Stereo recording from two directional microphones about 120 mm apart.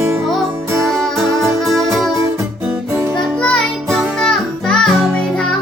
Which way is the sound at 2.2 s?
25° right (ahead or behind).